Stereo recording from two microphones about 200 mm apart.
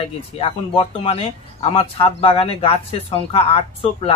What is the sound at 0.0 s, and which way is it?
Speech, 30° left (ahead or behind).